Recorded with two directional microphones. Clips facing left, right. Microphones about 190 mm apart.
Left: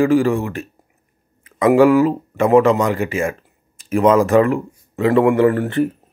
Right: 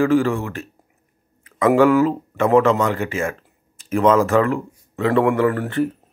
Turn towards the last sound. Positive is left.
turn(degrees=25)  # may be behind; listen again after turning